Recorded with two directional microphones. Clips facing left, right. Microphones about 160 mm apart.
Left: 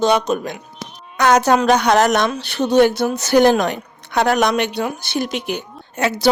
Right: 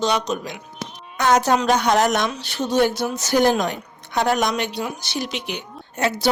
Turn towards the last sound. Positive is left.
turn(degrees=90)